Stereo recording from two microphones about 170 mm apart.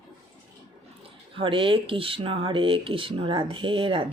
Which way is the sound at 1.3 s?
30° right (ahead or behind).